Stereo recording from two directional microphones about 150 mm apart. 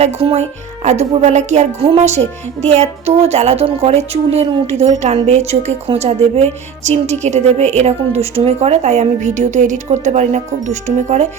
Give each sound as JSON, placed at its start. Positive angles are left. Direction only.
{"t": 0.0, "sound": "speech", "side_deg": -45}